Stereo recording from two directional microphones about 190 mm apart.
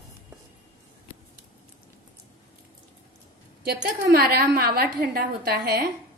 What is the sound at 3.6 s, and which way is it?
Speech, 55° right (ahead or behind).